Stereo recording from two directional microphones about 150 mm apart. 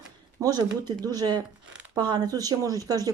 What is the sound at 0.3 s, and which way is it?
Speech, 25° right (ahead or behind).